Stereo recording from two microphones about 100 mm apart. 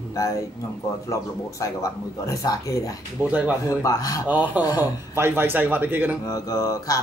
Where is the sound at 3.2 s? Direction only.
15° right (ahead or behind).